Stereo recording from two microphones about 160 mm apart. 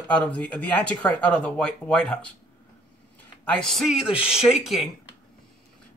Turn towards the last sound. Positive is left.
turn(degrees=0)  # may be behind; listen again after turning